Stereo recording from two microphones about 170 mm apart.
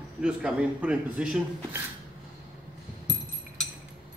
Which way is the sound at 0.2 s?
5° right (ahead or behind).